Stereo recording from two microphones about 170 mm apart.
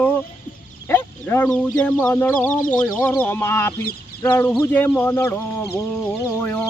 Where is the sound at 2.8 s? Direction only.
10° left (ahead or behind).